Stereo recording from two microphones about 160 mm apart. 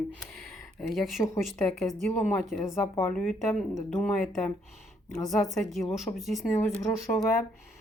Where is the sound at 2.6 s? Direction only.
15° left (ahead or behind).